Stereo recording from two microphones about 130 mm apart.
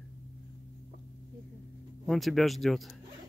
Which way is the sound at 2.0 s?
Centre (ahead or behind).